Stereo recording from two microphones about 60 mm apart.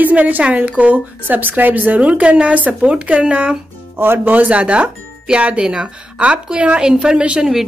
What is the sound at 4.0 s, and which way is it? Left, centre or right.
Speech, right.